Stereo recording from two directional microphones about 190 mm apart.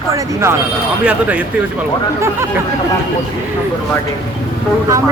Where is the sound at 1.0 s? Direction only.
5° right (ahead or behind).